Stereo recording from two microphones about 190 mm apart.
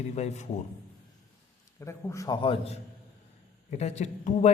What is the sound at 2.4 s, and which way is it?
A man's voice, 30° left (ahead or behind).